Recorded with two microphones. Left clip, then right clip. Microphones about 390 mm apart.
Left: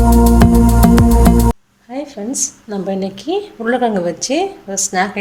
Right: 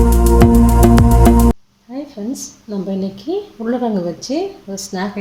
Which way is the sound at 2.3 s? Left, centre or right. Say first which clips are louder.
Left 5 dB; left.